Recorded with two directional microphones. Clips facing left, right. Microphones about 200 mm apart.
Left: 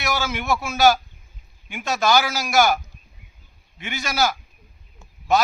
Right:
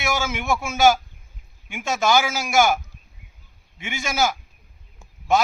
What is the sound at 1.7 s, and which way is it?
Speech, 15° right (ahead or behind).